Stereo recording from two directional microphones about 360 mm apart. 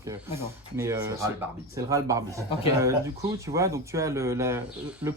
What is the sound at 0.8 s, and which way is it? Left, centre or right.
Speech, centre.